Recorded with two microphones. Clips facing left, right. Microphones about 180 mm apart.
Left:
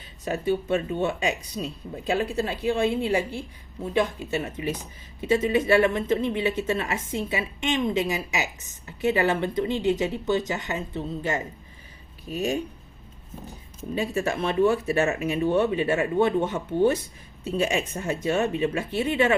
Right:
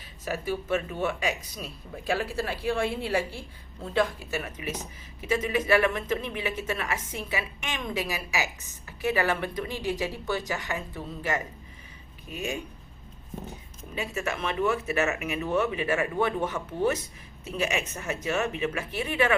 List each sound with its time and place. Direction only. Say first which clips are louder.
0.3 s speech: left 4 dB; 25° left (ahead or behind)
12.3 s speech: left 7 dB; 35° left (ahead or behind)
13.9 s speech: left 6 dB; 35° left (ahead or behind)